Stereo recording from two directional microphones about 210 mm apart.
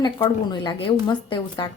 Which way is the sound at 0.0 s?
20° left (ahead or behind).